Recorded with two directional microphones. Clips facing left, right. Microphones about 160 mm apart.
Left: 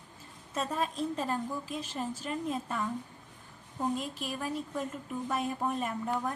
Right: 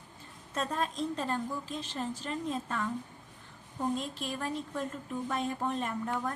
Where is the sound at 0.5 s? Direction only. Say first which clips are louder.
Even; 5° left (ahead or behind).